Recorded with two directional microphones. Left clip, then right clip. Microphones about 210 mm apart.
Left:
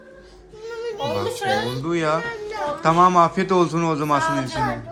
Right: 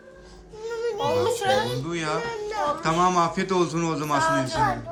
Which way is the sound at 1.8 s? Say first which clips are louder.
Left 6 dB; 5° right (ahead or behind).